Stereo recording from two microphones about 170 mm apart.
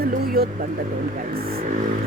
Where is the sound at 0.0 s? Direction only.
60° right (ahead or behind).